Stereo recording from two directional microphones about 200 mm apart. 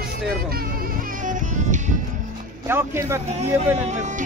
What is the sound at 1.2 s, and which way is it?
Music, 40° right (ahead or behind).